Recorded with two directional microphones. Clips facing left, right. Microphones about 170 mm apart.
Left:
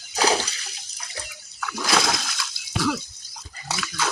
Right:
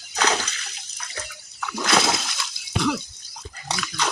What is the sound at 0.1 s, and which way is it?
Water, 10° left (ahead or behind).